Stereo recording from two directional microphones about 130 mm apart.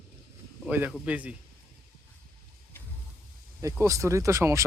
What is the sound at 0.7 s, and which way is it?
Speech, 15° right (ahead or behind).